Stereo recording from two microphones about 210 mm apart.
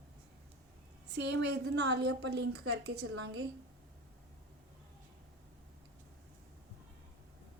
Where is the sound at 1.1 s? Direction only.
55° right (ahead or behind).